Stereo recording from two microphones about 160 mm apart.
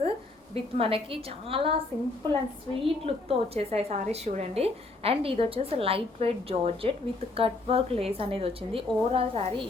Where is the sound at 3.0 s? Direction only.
40° right (ahead or behind).